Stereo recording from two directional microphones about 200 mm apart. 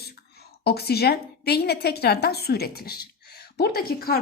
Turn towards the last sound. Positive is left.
turn(degrees=50)  # may be behind; listen again after turning